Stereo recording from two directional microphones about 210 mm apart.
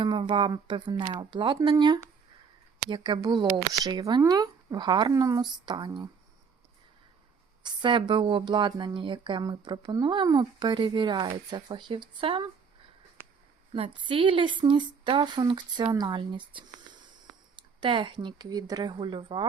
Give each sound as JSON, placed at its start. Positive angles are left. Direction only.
{"t": 0.0, "sound": "speech", "side_deg": -20}
{"t": 7.6, "sound": "speech", "side_deg": -20}
{"t": 13.7, "sound": "speech", "side_deg": -25}